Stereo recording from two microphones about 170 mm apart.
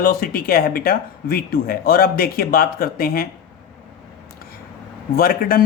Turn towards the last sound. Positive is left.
turn(degrees=60)  # may be behind; listen again after turning